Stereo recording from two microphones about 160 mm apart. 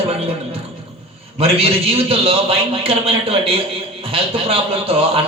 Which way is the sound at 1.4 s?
35° right (ahead or behind).